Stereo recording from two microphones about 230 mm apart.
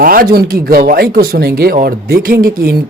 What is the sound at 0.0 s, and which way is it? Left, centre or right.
Speech, right.